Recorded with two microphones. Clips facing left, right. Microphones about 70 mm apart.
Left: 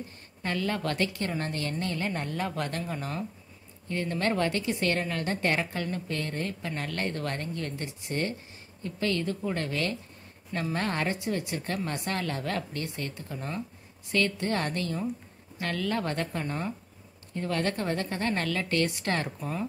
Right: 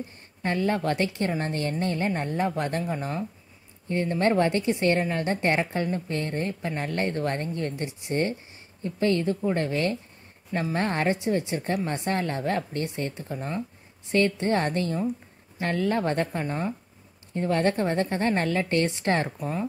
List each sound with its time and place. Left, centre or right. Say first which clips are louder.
0.4 s a woman's voice: right 5 dB; right